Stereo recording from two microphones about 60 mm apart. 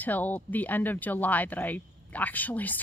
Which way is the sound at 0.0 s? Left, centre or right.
Left.